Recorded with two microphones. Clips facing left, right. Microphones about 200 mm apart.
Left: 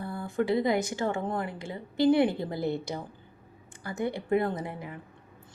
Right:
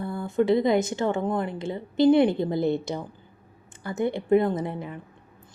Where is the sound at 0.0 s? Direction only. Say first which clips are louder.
Right 5 dB; 20° right (ahead or behind).